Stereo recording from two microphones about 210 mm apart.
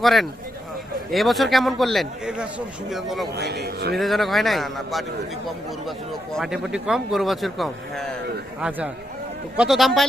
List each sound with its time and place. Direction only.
0.0 s speech: centre (ahead or behind)
3.3 s a man's voice: 50° right (ahead or behind)
3.9 s speech: centre (ahead or behind)
6.3 s speech: centre (ahead or behind)
9.6 s speech: centre (ahead or behind)